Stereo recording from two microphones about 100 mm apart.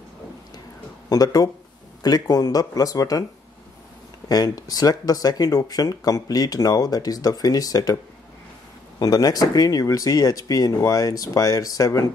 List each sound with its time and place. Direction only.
1.0 s speech: 40° left (ahead or behind)
4.3 s speech: 40° left (ahead or behind)
9.0 s speech: 40° left (ahead or behind)